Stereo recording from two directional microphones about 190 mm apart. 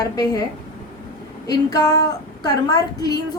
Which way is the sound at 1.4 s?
20° left (ahead or behind).